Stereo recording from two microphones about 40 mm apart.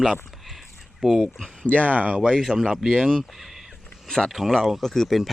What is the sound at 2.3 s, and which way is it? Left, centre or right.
Speech, centre.